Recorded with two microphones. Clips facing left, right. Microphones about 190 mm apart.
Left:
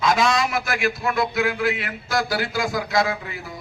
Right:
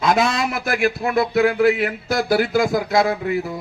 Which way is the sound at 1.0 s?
40° right (ahead or behind).